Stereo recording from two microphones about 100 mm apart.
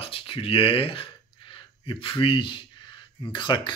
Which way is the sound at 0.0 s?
65° left (ahead or behind).